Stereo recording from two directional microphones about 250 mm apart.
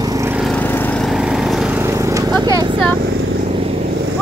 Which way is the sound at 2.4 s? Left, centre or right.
Centre.